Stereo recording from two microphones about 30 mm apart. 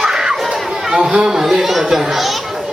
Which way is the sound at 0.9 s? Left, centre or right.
Right.